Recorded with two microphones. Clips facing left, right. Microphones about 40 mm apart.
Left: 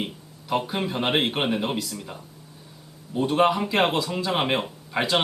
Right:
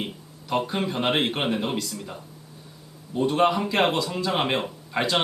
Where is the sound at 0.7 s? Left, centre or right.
Centre.